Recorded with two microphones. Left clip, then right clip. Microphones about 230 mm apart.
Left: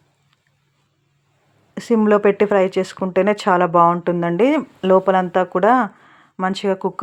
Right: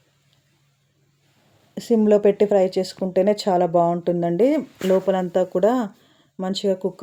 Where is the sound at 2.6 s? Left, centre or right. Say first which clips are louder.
Left 2 dB; centre.